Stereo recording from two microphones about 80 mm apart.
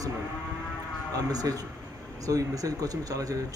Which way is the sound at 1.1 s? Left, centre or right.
Right.